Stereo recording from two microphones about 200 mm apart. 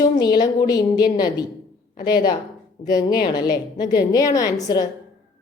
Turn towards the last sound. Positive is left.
turn(degrees=20)  # may be behind; listen again after turning